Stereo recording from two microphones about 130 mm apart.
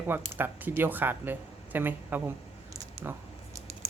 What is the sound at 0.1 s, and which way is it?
Speech, 15° right (ahead or behind).